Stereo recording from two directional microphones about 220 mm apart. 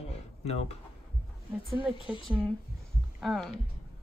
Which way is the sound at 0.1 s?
30° left (ahead or behind).